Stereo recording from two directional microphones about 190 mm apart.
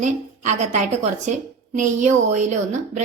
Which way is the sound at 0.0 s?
40° right (ahead or behind).